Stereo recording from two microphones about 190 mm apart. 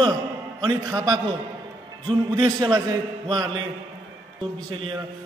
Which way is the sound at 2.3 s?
25° right (ahead or behind).